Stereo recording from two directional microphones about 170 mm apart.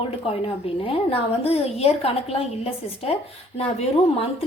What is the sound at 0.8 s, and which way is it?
A woman's voice, 35° left (ahead or behind).